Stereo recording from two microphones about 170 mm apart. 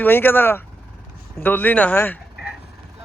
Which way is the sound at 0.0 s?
10° left (ahead or behind).